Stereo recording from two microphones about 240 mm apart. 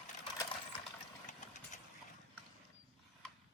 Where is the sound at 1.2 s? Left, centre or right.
Left.